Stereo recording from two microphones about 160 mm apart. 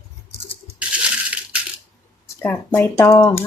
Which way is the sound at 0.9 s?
10° right (ahead or behind).